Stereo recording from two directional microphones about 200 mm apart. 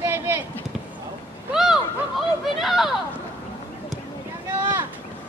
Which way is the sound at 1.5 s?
Centre (ahead or behind).